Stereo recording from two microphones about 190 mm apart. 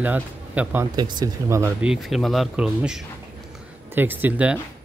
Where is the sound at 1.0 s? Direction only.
20° right (ahead or behind).